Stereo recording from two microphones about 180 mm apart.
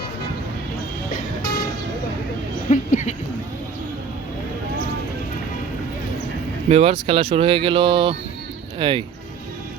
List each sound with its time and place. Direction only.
1.1 s vehicle: 50° left (ahead or behind)
2.6 s a sound: 45° left (ahead or behind)
6.7 s speech: 35° right (ahead or behind)